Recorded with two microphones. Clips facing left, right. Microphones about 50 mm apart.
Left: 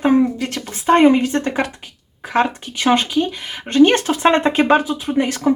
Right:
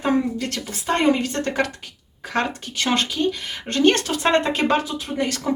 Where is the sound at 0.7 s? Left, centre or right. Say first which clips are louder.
Left 8 dB; left.